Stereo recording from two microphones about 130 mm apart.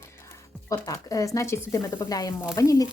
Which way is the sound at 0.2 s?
20° left (ahead or behind).